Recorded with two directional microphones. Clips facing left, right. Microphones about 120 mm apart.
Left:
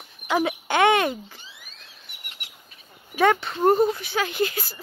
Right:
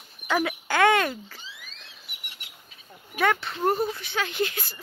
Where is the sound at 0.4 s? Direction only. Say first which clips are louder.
Left 2 dB; 25° left (ahead or behind).